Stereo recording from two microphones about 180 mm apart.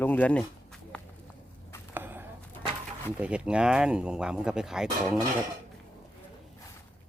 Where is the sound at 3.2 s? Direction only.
5° right (ahead or behind).